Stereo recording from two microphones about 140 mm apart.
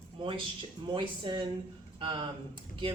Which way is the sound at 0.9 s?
35° right (ahead or behind).